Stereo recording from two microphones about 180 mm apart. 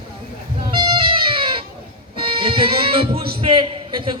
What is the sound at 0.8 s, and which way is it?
Music, 30° right (ahead or behind).